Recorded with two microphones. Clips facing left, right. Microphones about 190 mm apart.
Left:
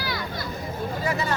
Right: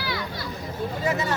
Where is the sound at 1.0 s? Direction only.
20° right (ahead or behind).